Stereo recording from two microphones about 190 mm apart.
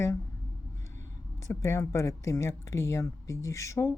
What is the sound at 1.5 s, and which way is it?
Speech, 15° left (ahead or behind).